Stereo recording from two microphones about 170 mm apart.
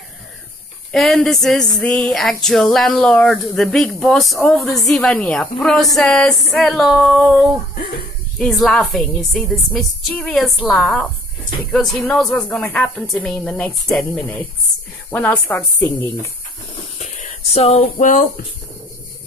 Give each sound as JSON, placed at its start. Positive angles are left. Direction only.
{"t": 0.9, "sound": "a sound", "side_deg": 0}
{"t": 15.0, "sound": "a woman's voice", "side_deg": 10}
{"t": 17.0, "sound": "speech", "side_deg": 40}